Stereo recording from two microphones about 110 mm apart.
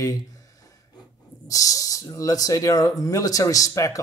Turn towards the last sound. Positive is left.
turn(degrees=30)  # may be behind; listen again after turning